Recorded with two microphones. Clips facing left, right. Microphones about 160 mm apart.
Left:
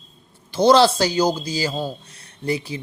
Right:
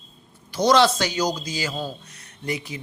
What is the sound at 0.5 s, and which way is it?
Speech, 30° left (ahead or behind).